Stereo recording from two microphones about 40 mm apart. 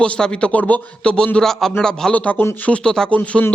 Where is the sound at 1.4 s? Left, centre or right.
Centre.